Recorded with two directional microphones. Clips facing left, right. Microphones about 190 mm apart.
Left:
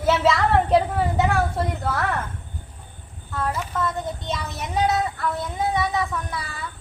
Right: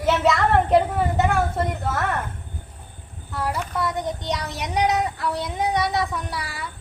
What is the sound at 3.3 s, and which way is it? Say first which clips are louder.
Speech: even; 10° right (ahead or behind).